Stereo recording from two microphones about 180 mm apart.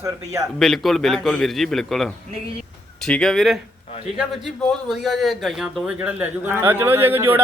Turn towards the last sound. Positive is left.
turn(degrees=-10)  # may be behind; listen again after turning